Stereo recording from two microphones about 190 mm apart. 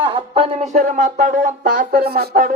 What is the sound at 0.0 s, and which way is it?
Speech, 25° right (ahead or behind).